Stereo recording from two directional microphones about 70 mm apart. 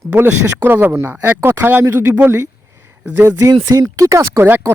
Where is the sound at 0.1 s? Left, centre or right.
Right.